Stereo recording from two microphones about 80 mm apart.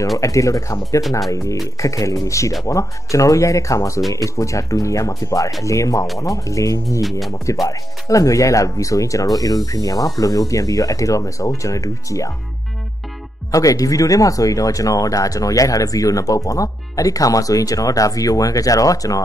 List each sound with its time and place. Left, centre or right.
0.2 s speech: left
1.8 s speech: left
7.0 s speech: centre
7.6 s speech: left
13.5 s speech: left